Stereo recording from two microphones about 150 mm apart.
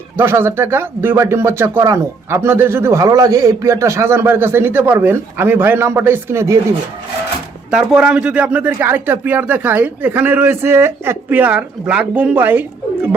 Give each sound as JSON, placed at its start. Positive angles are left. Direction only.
{"t": 0.2, "sound": "speech", "side_deg": -15}
{"t": 7.7, "sound": "speech", "side_deg": -5}